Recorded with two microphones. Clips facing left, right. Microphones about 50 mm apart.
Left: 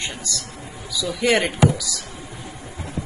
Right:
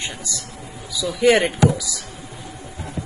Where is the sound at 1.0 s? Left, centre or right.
Centre.